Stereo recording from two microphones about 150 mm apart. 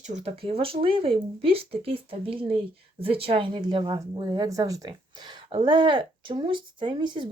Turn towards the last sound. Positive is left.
turn(degrees=-30)  # may be behind; listen again after turning